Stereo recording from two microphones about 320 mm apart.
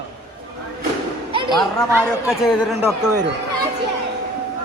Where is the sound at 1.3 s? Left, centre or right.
Centre.